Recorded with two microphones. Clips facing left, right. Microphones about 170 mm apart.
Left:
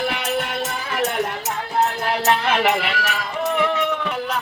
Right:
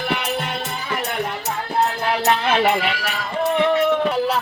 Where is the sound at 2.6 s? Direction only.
30° right (ahead or behind).